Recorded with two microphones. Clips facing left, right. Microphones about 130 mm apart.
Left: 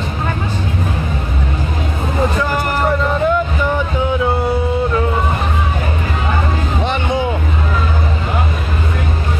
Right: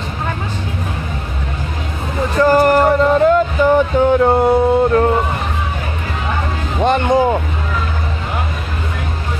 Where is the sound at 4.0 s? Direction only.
50° right (ahead or behind).